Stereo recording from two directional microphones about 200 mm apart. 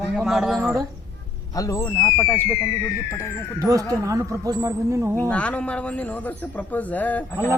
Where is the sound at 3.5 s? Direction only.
15° right (ahead or behind).